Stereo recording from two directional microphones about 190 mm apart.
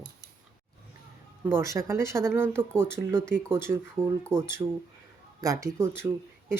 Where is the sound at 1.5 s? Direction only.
15° right (ahead or behind).